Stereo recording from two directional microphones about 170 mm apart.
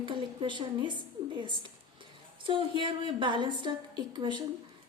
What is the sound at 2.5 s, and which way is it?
A woman's voice, 30° right (ahead or behind).